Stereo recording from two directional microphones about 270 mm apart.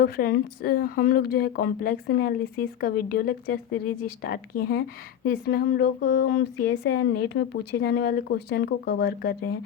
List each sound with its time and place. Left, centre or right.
0.0 s speech: left